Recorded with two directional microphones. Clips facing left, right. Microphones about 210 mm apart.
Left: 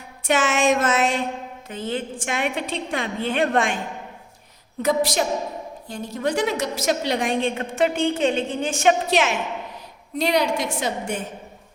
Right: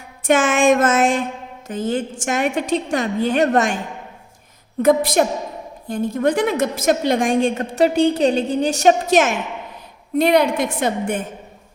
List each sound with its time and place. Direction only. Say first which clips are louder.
0.3 s a woman's voice: right 5 dB; 50° right (ahead or behind)
4.8 s a woman's voice: right 6 dB; 55° right (ahead or behind)